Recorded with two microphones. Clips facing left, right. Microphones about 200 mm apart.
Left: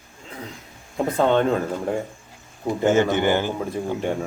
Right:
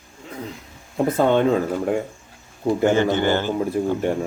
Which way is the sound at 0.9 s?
5° right (ahead or behind).